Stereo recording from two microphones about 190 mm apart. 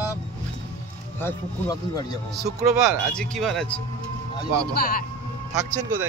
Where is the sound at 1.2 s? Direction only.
20° left (ahead or behind).